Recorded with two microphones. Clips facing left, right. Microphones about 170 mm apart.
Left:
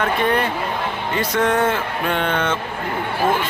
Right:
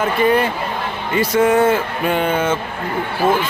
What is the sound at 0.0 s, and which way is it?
Speech, 5° right (ahead or behind).